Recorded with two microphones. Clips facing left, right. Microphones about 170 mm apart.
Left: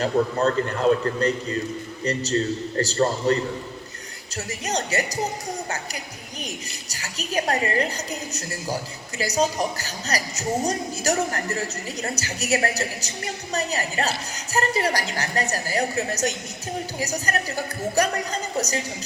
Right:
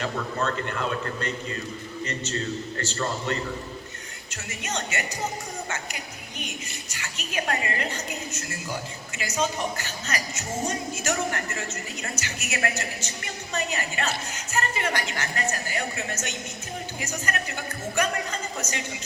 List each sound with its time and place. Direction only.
0.0 s a woman's voice: 35° left (ahead or behind)
4.6 s a woman's voice: 35° left (ahead or behind)
6.9 s a woman's voice: 35° left (ahead or behind)